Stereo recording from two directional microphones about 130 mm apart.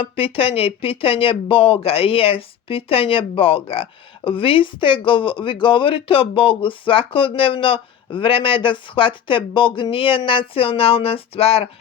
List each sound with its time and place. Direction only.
0.0 s speech: 45° left (ahead or behind)